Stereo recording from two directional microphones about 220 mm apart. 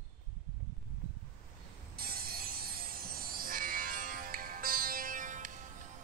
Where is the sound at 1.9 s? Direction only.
45° right (ahead or behind).